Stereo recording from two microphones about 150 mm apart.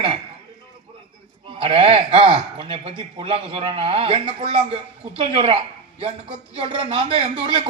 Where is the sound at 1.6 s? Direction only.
35° right (ahead or behind).